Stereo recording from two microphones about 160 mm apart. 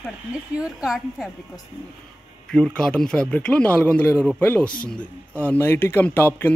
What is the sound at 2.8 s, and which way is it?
A woman's voice, 5° left (ahead or behind).